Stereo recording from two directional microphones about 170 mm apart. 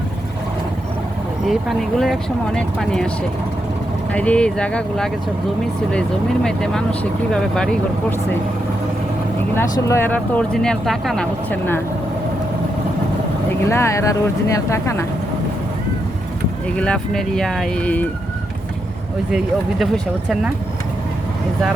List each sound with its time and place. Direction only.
1.5 s speech: centre (ahead or behind)
4.1 s speech: 5° left (ahead or behind)
9.6 s speech: 15° left (ahead or behind)
13.7 s speech: 15° left (ahead or behind)
16.7 s speech: 5° left (ahead or behind)
19.8 s speech: centre (ahead or behind)